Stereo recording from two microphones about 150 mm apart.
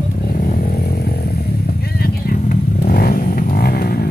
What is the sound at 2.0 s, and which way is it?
Vehicle, 75° left (ahead or behind).